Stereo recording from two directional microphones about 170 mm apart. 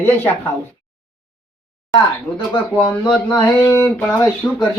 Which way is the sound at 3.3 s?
20° left (ahead or behind).